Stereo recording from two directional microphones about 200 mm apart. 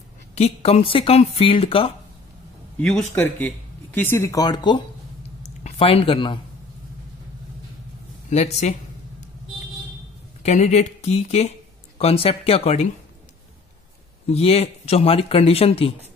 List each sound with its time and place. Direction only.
0.3 s speech: 30° left (ahead or behind)
2.8 s speech: 5° left (ahead or behind); by 4.8 s 20° left (ahead or behind)
5.4 s speech: 35° left (ahead or behind)
8.3 s speech: 35° left (ahead or behind)
10.4 s speech: 35° left (ahead or behind)
14.3 s speech: 30° left (ahead or behind)